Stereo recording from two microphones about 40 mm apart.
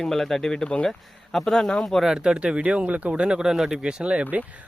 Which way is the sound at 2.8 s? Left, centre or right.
Right.